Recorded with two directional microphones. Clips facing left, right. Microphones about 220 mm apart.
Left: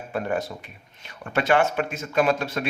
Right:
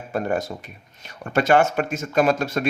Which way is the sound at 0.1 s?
45° right (ahead or behind).